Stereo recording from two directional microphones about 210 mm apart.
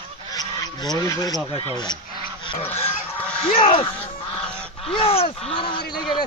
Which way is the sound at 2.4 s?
25° left (ahead or behind).